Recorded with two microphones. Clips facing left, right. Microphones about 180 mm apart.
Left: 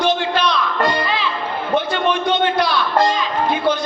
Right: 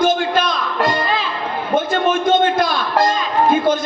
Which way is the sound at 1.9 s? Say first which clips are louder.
Right 3 dB; 45° right (ahead or behind).